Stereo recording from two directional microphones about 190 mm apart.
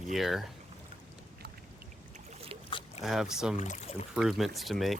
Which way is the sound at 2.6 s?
30° left (ahead or behind).